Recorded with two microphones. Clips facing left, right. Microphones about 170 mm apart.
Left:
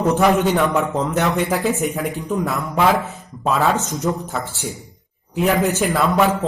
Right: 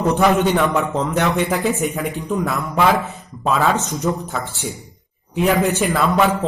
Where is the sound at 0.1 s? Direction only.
5° left (ahead or behind).